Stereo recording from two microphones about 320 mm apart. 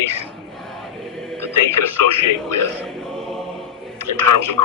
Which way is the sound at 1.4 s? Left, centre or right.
Left.